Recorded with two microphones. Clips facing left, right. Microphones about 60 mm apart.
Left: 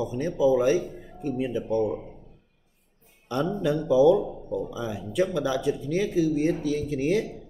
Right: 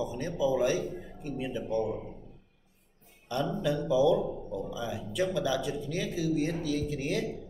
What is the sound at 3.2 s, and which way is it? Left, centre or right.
Speech, left.